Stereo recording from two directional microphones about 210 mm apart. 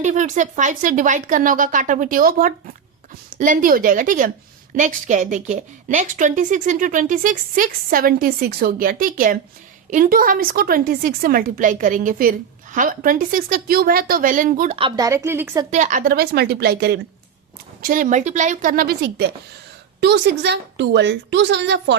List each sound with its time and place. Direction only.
0.0 s a woman's voice: 35° right (ahead or behind)
14.8 s a woman's voice: 20° right (ahead or behind)
15.7 s a woman's voice: 35° right (ahead or behind)
17.8 s a woman's voice: 40° right (ahead or behind); by 21.9 s 55° right (ahead or behind)